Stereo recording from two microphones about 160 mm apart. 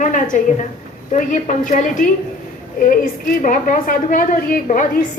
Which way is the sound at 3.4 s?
55° left (ahead or behind).